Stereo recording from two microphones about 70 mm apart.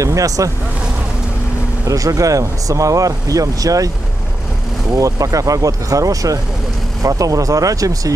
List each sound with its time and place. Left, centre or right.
0.0 s speech: right
1.9 s speech: right
4.9 s speech: right